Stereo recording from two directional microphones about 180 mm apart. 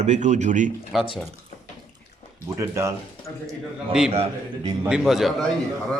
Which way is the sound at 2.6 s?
15° right (ahead or behind).